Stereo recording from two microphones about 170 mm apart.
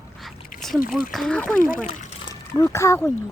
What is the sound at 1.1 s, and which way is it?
Speech, 5° left (ahead or behind).